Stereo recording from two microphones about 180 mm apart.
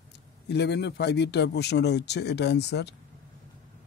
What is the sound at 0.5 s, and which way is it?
Speech, 70° left (ahead or behind).